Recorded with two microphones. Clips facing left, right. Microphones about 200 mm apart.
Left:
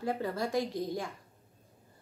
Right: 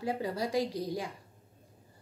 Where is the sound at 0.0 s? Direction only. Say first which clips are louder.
Even; 15° right (ahead or behind).